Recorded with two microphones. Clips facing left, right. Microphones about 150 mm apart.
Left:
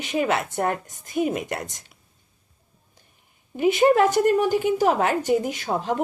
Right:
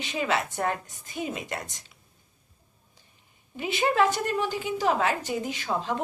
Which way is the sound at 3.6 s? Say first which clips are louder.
Left 7 dB; 45° left (ahead or behind).